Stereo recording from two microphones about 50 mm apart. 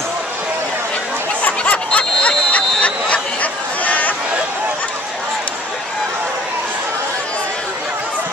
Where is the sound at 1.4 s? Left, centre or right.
Left.